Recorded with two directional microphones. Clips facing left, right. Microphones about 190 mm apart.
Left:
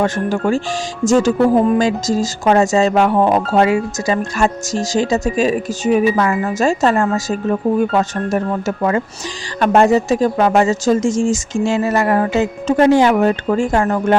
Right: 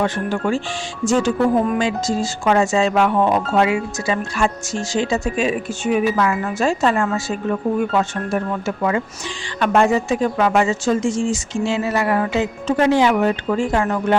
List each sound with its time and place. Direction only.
0.0 s speech: 45° left (ahead or behind)
1.5 s speech: 30° left (ahead or behind); by 14.2 s 45° left (ahead or behind)